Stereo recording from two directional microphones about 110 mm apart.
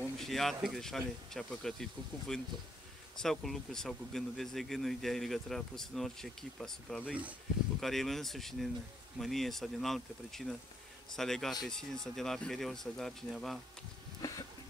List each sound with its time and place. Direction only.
0.2 s speech: centre (ahead or behind)
7.1 s speech: 15° right (ahead or behind)
7.8 s speech: centre (ahead or behind)
14.2 s a sound: 30° left (ahead or behind)